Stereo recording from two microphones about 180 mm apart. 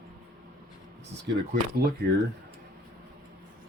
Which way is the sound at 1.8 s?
65° right (ahead or behind).